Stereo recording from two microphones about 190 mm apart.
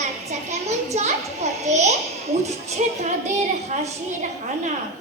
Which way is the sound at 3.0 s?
40° right (ahead or behind).